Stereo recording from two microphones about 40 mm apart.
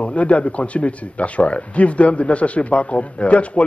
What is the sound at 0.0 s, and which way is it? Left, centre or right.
A man's voice, left.